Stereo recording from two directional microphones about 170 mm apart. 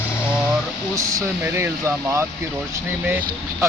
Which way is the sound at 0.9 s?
15° right (ahead or behind).